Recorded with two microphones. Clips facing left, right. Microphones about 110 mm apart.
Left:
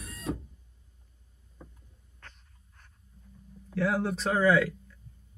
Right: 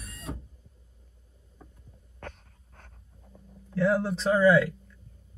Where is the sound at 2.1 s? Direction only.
55° right (ahead or behind).